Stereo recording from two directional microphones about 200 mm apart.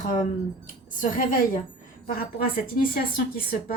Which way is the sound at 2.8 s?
45° left (ahead or behind).